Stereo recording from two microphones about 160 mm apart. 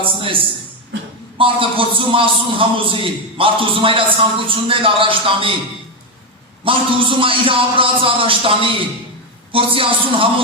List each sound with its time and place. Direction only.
0.0 s a sound: 35° right (ahead or behind)
1.4 s a man's voice: 35° right (ahead or behind)
6.7 s a man's voice: 35° right (ahead or behind)